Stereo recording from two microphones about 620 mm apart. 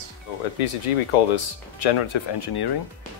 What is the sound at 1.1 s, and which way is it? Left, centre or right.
Speech, left.